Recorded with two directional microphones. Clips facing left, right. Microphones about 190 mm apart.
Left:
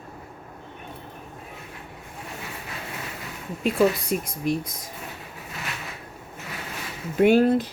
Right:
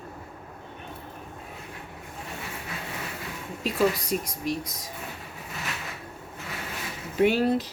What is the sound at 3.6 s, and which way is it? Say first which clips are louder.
Speech: left 4 dB; 55° left (ahead or behind).